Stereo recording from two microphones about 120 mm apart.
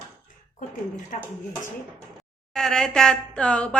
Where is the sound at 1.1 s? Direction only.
90° left.